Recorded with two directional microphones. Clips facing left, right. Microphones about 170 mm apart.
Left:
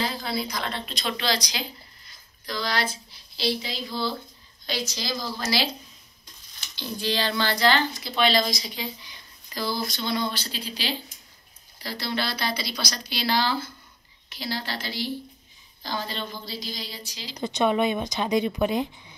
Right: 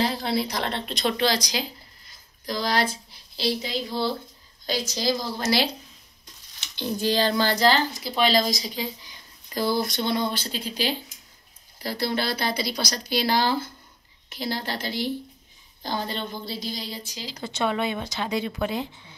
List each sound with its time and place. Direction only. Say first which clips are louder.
0.2 s a woman's voice: right 4 dB; 65° right (ahead or behind)
6.7 s a woman's voice: right 4 dB; 50° right (ahead or behind)
17.3 s speech: left 3 dB; 15° left (ahead or behind)